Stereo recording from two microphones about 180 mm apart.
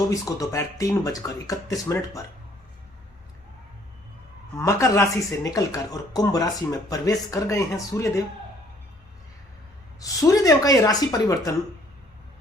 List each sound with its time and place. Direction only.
0.1 s speech: 20° left (ahead or behind)
4.5 s speech: 15° left (ahead or behind)
10.0 s speech: 20° left (ahead or behind)